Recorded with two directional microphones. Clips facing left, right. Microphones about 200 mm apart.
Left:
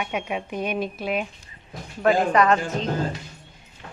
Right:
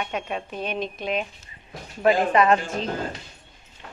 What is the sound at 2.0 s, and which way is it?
Speech, 10° right (ahead or behind).